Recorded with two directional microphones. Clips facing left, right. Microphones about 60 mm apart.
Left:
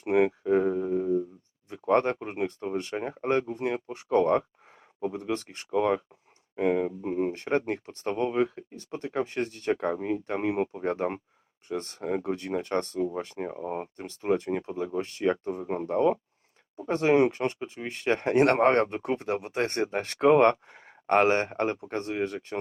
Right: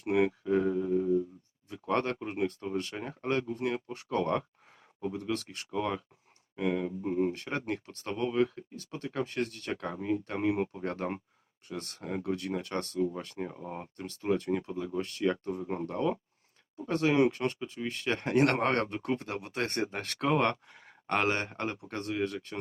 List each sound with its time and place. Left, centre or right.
0.0 s a sound: left
1.8 s speech: left
7.3 s speech: left